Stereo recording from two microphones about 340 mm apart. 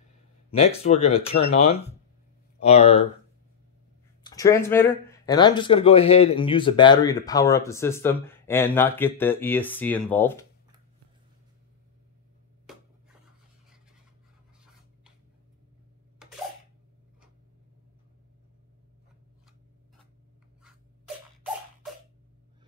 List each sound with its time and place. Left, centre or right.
0.5 s speech: centre
4.2 s speech: centre